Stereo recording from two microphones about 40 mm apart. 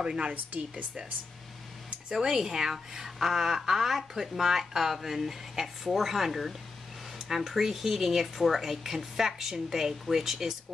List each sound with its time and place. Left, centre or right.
0.0 s a woman's voice: right
2.1 s speech: centre